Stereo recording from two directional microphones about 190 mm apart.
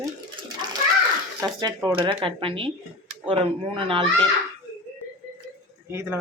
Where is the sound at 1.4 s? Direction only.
20° right (ahead or behind).